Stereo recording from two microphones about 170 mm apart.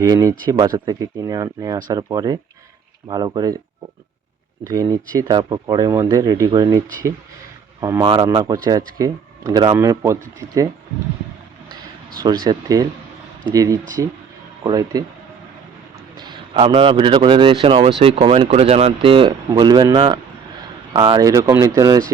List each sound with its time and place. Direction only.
0.0 s speech: 20° right (ahead or behind)
4.7 s speech: 25° right (ahead or behind)
8.1 s speech: 30° right (ahead or behind)
12.5 s speech: 25° right (ahead or behind)
16.6 s speech: 30° right (ahead or behind)